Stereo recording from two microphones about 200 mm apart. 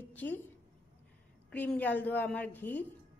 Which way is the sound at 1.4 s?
5° left (ahead or behind).